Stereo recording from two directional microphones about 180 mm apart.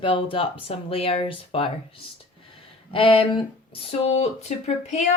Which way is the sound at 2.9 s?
30° left (ahead or behind).